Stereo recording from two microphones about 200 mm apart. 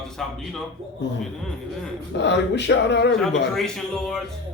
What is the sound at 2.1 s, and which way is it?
Speech, 60° left (ahead or behind).